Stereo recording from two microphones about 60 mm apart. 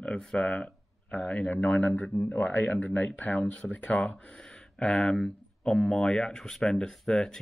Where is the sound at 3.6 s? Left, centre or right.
Centre.